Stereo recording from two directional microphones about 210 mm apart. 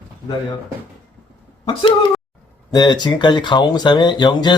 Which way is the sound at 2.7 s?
20° left (ahead or behind).